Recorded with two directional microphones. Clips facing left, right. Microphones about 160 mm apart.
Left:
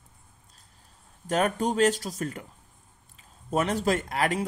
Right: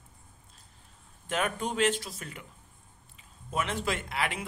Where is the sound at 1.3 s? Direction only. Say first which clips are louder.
Left 6 dB; 40° left (ahead or behind).